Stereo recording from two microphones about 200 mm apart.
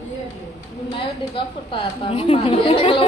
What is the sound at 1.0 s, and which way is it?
Speech, 25° left (ahead or behind).